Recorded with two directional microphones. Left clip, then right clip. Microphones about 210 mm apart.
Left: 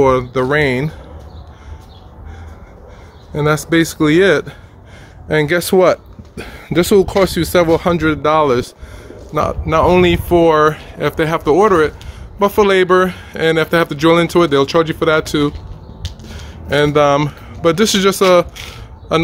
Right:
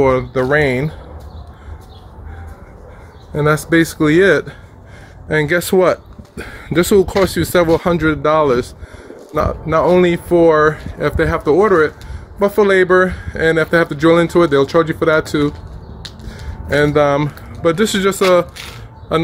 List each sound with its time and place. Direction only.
0.3 s speech: 10° left (ahead or behind)
3.3 s speech: centre (ahead or behind); by 18.5 s 15° left (ahead or behind)